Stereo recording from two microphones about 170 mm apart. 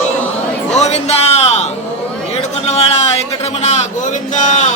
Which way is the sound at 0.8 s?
40° left (ahead or behind).